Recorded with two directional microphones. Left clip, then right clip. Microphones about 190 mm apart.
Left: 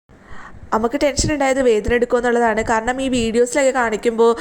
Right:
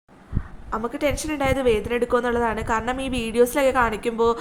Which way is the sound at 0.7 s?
30° left (ahead or behind).